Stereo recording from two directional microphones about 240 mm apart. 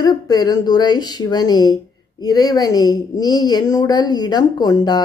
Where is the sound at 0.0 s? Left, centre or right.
Centre.